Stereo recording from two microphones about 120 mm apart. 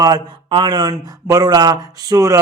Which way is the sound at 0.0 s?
35° right (ahead or behind).